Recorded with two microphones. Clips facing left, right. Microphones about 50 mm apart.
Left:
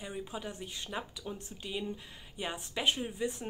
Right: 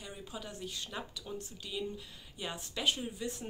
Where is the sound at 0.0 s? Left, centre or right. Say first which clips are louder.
Left 5 dB; left.